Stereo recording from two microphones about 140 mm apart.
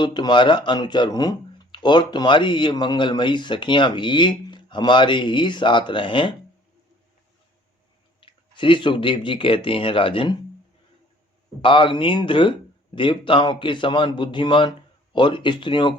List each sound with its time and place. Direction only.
0.0 s speech: 30° left (ahead or behind)
8.2 s speech: 40° left (ahead or behind)
11.6 s speech: 35° left (ahead or behind)